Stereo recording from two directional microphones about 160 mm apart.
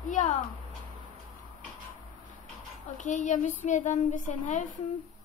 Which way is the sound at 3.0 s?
50° left (ahead or behind).